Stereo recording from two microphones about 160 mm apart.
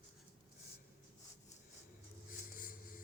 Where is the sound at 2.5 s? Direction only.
60° left (ahead or behind).